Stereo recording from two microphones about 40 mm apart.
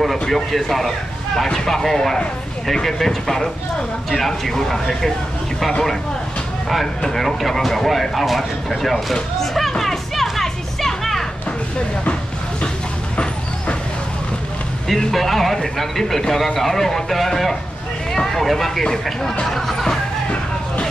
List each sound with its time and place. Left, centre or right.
0.0 s a man's voice: centre
7.0 s speech: centre
9.1 s music: centre
13.1 s dog: left
14.9 s a man's voice: centre